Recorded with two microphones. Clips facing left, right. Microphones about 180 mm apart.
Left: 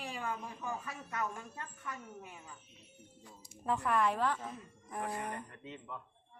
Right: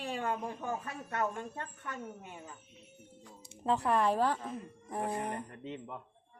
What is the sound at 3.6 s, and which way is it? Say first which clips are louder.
A woman's voice: right 3 dB; 30° right (ahead or behind).